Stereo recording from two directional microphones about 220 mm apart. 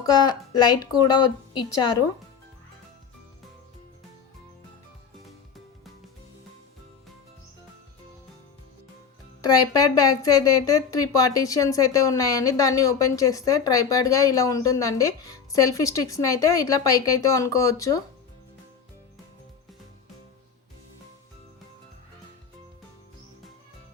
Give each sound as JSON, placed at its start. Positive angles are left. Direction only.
{"t": 0.0, "sound": "a woman's voice", "side_deg": 15}
{"t": 9.4, "sound": "a woman's voice", "side_deg": 15}